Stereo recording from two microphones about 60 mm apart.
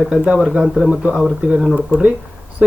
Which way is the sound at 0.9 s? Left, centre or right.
Right.